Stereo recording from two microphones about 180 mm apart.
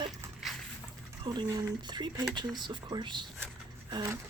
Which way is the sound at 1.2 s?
20° right (ahead or behind).